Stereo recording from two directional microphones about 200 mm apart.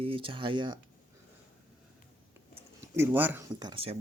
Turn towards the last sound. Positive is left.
turn(degrees=-25)  # may be behind; listen again after turning